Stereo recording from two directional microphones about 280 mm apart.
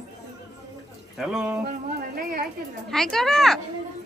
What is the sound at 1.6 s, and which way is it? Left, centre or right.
Speech, right.